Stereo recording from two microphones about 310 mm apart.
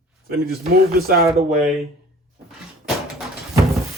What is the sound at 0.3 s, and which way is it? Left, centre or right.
Speech, right.